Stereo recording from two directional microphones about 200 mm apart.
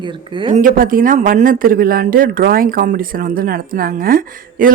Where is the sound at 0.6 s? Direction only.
45° right (ahead or behind).